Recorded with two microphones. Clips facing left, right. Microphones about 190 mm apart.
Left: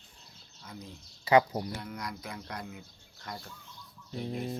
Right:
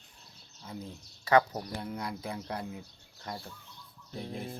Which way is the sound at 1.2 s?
10° left (ahead or behind).